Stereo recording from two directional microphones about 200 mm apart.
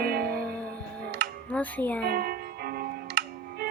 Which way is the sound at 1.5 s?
10° left (ahead or behind).